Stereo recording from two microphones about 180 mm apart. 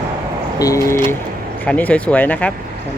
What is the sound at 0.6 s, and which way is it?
Speech, 20° left (ahead or behind).